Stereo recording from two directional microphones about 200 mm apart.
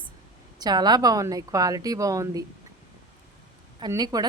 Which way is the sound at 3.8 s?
20° right (ahead or behind).